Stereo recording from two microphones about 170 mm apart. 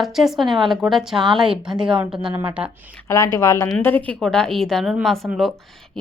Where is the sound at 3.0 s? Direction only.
20° left (ahead or behind).